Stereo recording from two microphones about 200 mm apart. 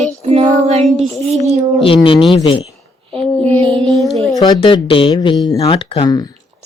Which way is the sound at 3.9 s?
Centre (ahead or behind).